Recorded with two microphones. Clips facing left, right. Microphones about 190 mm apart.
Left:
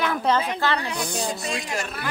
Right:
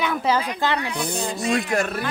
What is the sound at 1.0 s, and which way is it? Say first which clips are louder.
Speech: right 2 dB; 60° right (ahead or behind).